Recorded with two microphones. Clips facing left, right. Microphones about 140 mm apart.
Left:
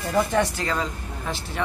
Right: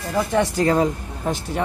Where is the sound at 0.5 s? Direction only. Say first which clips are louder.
Right 9 dB; 40° right (ahead or behind).